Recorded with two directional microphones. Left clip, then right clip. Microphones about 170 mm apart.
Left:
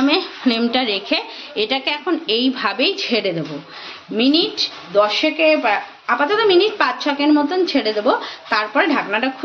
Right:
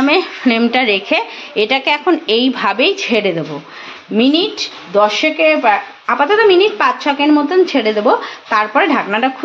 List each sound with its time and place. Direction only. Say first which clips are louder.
0.0 s a woman's voice: right 4 dB; 25° right (ahead or behind)
4.2 s speech: right 3 dB; 45° right (ahead or behind)